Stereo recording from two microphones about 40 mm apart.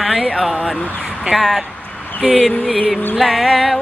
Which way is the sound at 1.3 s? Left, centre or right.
Centre.